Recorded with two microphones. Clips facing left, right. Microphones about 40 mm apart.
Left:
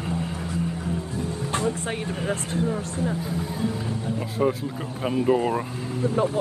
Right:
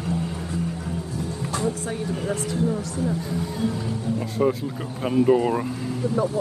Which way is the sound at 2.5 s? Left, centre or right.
Left.